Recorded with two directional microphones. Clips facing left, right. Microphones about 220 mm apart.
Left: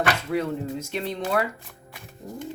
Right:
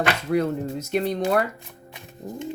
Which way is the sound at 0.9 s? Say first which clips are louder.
Right 8 dB; 45° right (ahead or behind).